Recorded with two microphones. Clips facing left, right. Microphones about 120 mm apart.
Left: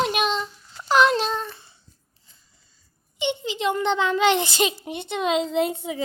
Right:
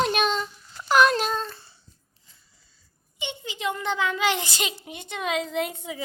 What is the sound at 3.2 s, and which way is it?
A child's voice, 25° left (ahead or behind).